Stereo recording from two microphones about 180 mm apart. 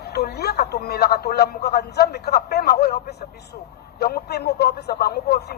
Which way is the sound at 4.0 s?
60° left (ahead or behind).